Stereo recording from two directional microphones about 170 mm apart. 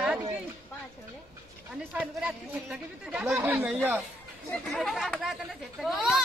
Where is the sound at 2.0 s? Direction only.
5° right (ahead or behind).